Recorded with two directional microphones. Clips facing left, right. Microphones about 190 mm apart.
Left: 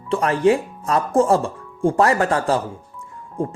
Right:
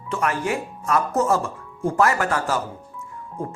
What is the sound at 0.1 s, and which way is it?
Speech, 30° left (ahead or behind).